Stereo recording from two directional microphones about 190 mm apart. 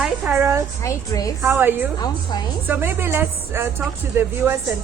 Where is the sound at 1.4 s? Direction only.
10° right (ahead or behind).